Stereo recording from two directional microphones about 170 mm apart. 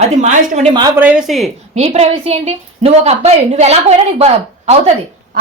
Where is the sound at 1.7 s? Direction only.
40° right (ahead or behind).